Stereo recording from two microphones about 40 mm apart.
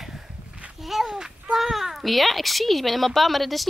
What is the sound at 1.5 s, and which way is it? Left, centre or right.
A child's voice, centre.